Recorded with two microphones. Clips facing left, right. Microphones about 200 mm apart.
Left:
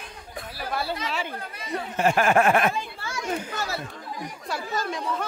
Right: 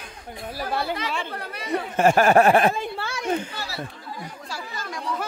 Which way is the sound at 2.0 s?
40° right (ahead or behind).